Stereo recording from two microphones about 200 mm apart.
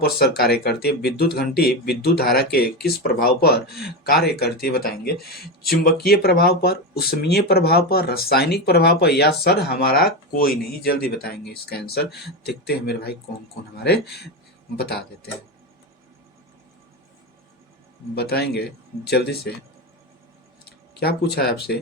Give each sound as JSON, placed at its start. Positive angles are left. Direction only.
{"t": 0.0, "sound": "speech", "side_deg": 50}
{"t": 18.1, "sound": "speech", "side_deg": 55}
{"t": 20.7, "sound": "speech", "side_deg": 50}